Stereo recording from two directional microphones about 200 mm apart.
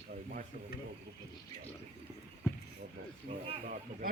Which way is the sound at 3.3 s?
30° right (ahead or behind).